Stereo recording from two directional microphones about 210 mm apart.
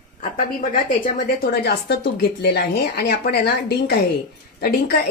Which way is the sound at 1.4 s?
50° left (ahead or behind).